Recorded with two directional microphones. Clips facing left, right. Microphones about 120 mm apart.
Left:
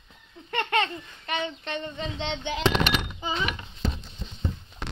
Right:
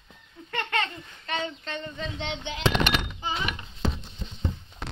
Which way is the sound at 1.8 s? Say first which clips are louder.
Left 2 dB; 30° left (ahead or behind).